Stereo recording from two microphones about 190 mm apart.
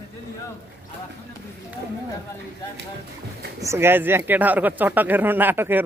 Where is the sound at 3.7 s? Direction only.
10° right (ahead or behind).